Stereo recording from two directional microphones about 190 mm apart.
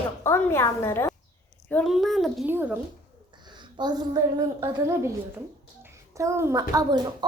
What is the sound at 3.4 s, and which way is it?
A woman's voice, 25° right (ahead or behind).